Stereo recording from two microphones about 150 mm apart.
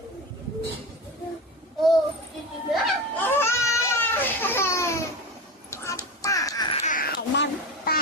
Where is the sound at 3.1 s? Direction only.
15° left (ahead or behind).